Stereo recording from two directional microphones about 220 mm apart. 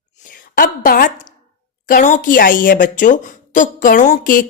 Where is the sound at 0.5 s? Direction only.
40° left (ahead or behind).